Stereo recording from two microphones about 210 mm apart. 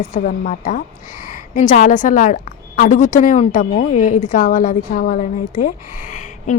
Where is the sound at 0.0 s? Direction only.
40° left (ahead or behind).